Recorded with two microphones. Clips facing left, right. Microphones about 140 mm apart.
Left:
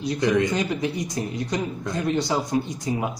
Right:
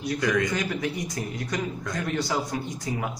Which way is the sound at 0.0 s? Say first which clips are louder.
Left 4 dB; 20° left (ahead or behind).